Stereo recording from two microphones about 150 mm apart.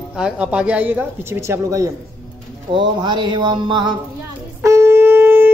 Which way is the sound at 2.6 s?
30° right (ahead or behind).